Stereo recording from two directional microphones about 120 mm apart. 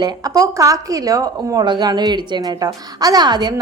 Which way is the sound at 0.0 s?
35° right (ahead or behind).